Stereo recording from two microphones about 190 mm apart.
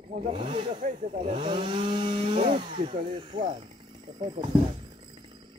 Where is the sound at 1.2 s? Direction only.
25° right (ahead or behind).